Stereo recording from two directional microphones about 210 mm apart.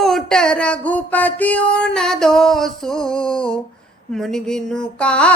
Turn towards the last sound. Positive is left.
turn(degrees=5)  # may be behind; listen again after turning